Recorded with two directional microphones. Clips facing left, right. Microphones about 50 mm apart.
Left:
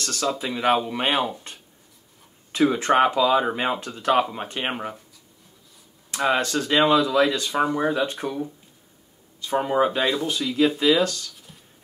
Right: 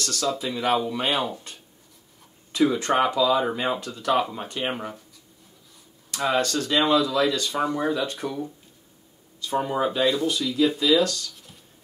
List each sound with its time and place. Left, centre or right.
0.0 s speech: left
6.0 s speech: left